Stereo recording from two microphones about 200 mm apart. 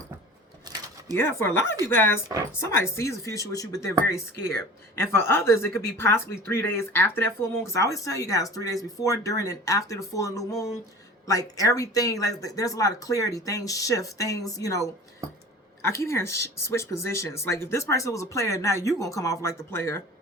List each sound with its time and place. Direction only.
1.1 s a woman's voice: 10° left (ahead or behind)